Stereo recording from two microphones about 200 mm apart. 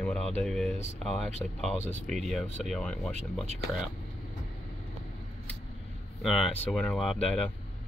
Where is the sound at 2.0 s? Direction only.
Centre (ahead or behind).